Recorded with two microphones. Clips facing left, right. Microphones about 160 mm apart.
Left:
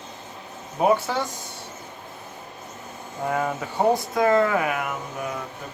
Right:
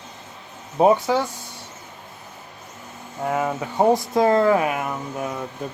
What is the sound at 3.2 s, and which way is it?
Speech, 10° right (ahead or behind).